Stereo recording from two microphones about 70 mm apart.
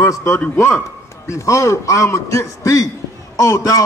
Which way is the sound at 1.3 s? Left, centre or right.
Left.